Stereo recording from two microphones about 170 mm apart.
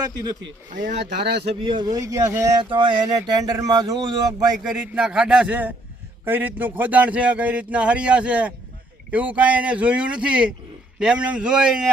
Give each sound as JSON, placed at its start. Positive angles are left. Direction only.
{"t": 0.7, "sound": "speech", "side_deg": -50}
{"t": 1.6, "sound": "speech", "side_deg": -25}
{"t": 4.6, "sound": "a man's voice", "side_deg": -5}